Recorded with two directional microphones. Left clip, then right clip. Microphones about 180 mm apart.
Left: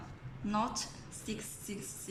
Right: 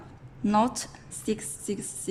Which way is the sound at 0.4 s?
50° right (ahead or behind).